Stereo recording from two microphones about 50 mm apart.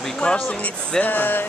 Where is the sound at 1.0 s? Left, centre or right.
Left.